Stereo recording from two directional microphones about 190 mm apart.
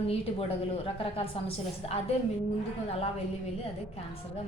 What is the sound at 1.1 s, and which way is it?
Speech, 30° left (ahead or behind).